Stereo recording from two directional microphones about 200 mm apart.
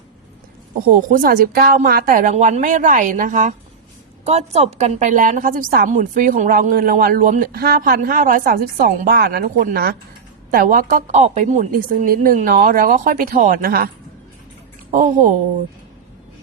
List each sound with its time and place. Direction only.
0.9 s a woman's voice: 45° right (ahead or behind)